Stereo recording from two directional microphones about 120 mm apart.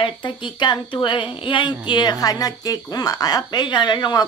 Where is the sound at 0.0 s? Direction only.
40° left (ahead or behind).